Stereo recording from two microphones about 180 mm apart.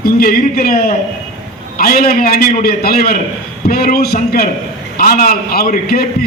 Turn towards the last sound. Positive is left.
turn(degrees=55)  # may be behind; listen again after turning